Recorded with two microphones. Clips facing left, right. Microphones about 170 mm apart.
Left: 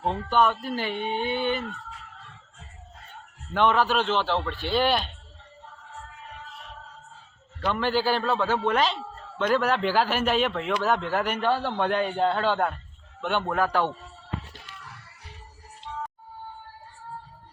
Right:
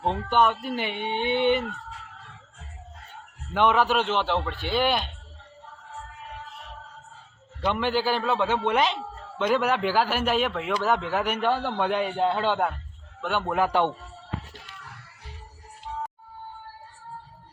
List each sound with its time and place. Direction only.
0.0 s speech: 20° right (ahead or behind)
3.5 s a man's voice: 10° right (ahead or behind)
7.7 s a man's voice: 15° right (ahead or behind)
13.6 s speech: 20° right (ahead or behind)